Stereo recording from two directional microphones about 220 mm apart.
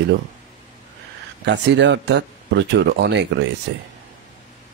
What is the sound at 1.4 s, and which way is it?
Speech, 55° right (ahead or behind).